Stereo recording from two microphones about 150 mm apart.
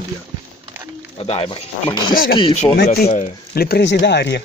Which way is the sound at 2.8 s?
90° left.